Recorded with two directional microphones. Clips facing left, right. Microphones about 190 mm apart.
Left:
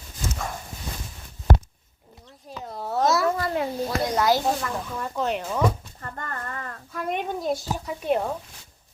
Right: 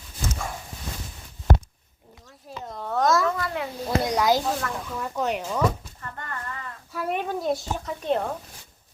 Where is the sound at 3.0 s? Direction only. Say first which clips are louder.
Left 1 dB; 30° left (ahead or behind).